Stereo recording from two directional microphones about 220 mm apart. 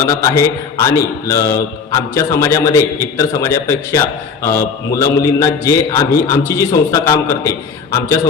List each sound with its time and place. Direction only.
0.0 s a man's voice: 15° left (ahead or behind)